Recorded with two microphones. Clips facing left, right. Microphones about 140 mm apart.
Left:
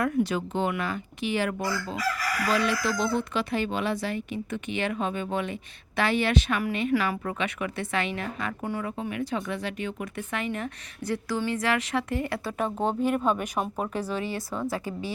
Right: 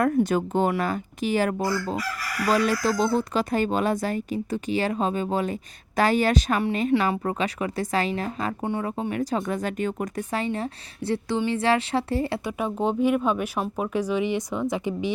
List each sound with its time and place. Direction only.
0.0 s speech: 45° right (ahead or behind)
8.6 s speech: 25° right (ahead or behind)
8.9 s speech: 35° right (ahead or behind)
12.5 s speech: 10° right (ahead or behind)